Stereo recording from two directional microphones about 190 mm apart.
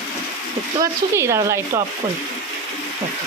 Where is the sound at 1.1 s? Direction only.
15° right (ahead or behind).